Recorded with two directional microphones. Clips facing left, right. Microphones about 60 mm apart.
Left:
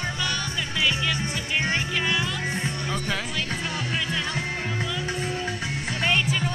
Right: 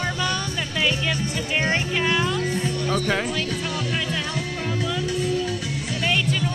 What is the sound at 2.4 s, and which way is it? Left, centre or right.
Music, left.